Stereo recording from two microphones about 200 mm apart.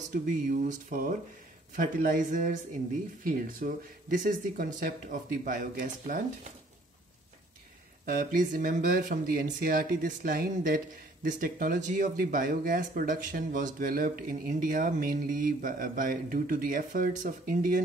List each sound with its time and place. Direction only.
0.1 s speech: 40° right (ahead or behind)
8.0 s speech: 45° right (ahead or behind)